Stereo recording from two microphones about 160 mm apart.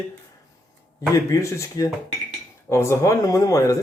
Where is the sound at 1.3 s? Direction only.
20° left (ahead or behind).